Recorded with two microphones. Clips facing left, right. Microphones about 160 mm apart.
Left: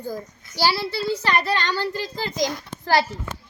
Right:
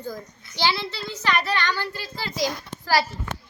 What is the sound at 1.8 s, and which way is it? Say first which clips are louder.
Speech: left 5 dB; 15° left (ahead or behind).